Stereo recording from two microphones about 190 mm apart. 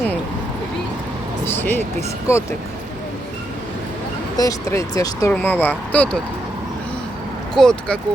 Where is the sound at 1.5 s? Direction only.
10° left (ahead or behind).